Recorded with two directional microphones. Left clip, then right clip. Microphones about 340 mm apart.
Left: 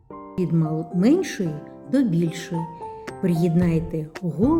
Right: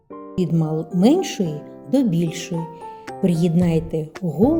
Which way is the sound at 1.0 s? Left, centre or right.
Centre.